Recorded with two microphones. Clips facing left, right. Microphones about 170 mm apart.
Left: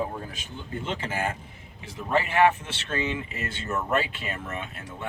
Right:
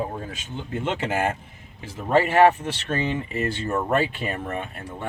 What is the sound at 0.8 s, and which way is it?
Speech, 80° right.